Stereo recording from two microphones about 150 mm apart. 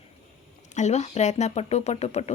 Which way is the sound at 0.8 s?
50° left (ahead or behind).